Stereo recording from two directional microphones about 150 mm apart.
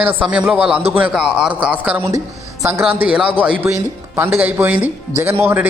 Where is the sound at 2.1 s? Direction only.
20° right (ahead or behind).